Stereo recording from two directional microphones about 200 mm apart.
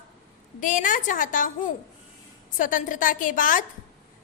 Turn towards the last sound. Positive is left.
turn(degrees=40)  # may be behind; listen again after turning